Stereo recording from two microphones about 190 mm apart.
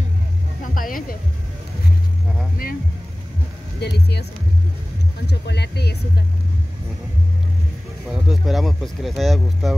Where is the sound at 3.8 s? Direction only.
60° left (ahead or behind).